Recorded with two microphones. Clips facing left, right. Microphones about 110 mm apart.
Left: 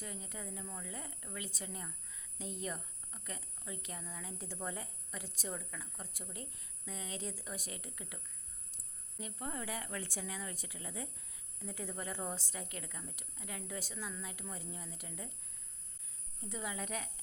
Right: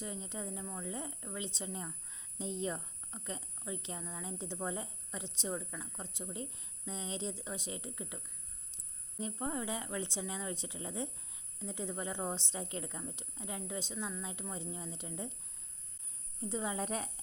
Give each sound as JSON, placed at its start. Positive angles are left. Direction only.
{"t": 0.0, "sound": "speech", "side_deg": -25}
{"t": 16.5, "sound": "a woman's voice", "side_deg": -30}